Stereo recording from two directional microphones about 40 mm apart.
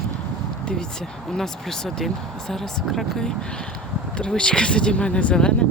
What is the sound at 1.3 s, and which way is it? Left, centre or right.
Speech, centre.